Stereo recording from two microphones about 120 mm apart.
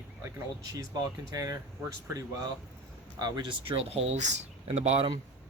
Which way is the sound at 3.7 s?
55° right (ahead or behind).